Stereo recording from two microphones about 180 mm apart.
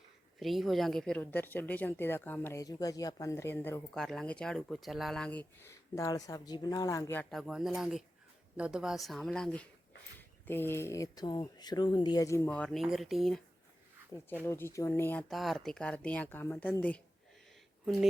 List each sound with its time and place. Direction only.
0.3 s speech: centre (ahead or behind); by 12.5 s 15° left (ahead or behind)
12.5 s speech: 5° left (ahead or behind)
14.1 s speech: 15° left (ahead or behind)
15.3 s speech: centre (ahead or behind)